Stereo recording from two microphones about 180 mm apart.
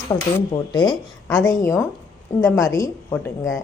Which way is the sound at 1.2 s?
15° left (ahead or behind).